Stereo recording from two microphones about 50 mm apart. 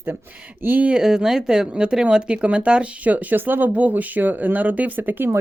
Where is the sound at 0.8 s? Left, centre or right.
Centre; by 5.3 s right.